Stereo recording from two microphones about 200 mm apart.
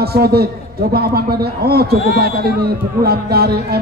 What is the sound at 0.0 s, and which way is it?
A man's voice, 50° right (ahead or behind).